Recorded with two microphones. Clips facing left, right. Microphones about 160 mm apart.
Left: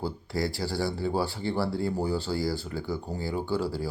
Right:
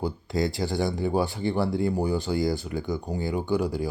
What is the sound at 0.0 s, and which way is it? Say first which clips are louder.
Speech: right 3 dB; 20° right (ahead or behind).